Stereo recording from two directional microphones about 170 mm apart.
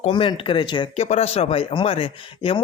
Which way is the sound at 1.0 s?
40° left (ahead or behind).